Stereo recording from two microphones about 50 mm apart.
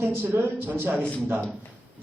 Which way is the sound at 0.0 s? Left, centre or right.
Right.